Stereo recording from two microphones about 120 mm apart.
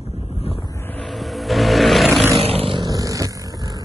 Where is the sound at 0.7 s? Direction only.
15° left (ahead or behind).